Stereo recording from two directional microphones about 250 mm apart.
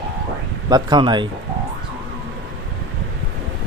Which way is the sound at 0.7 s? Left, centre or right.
Centre.